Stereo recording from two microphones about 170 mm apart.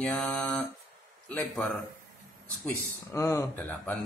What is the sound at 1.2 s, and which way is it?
Speech, 5° left (ahead or behind).